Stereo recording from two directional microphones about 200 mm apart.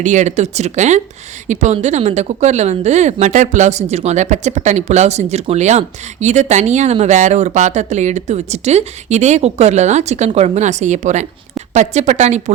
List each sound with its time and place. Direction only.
0.0 s speech: 35° right (ahead or behind)